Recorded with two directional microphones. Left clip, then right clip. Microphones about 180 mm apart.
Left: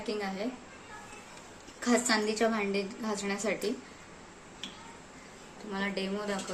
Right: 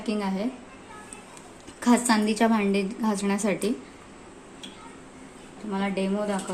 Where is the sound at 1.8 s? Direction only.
50° right (ahead or behind).